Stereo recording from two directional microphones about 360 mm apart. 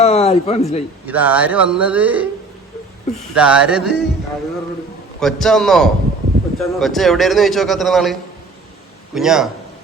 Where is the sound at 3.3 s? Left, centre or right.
Centre.